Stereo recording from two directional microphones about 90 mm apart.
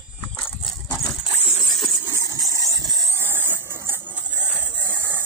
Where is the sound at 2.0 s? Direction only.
35° right (ahead or behind).